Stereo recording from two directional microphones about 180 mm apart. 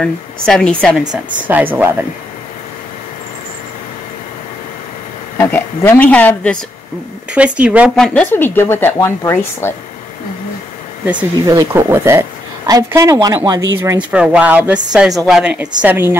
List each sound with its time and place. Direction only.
0.0 s a woman's voice: 5° left (ahead or behind)
1.5 s speech: 10° right (ahead or behind)
5.4 s speech: 10° left (ahead or behind)
7.3 s speech: 5° right (ahead or behind)
7.9 s speech: 5° left (ahead or behind)
11.4 s speech: 15° right (ahead or behind)
14.1 s a woman's voice: 5° right (ahead or behind)